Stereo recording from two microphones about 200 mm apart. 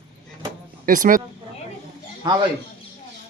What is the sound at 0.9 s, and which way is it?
Speech, 40° right (ahead or behind).